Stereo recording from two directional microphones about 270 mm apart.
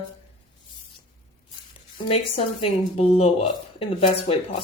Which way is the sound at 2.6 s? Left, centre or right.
Left.